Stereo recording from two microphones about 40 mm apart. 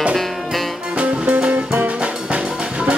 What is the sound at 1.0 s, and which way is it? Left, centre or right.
Music, right.